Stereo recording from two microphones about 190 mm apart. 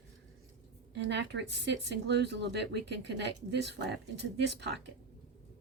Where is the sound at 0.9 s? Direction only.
65° right (ahead or behind).